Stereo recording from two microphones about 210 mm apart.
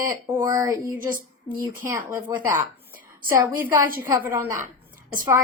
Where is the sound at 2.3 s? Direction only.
15° right (ahead or behind).